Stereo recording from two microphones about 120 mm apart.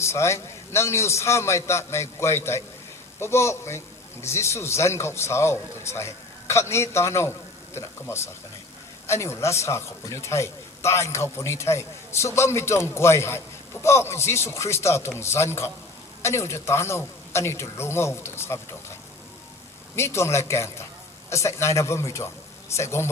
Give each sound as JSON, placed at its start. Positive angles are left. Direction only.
{"t": 0.0, "sound": "a man's voice", "side_deg": 20}
{"t": 20.0, "sound": "a man's voice", "side_deg": 20}